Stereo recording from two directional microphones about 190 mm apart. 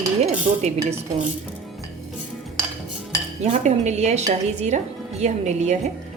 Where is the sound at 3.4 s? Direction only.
35° right (ahead or behind).